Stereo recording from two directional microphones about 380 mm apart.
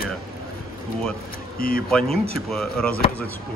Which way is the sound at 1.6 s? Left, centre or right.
Left.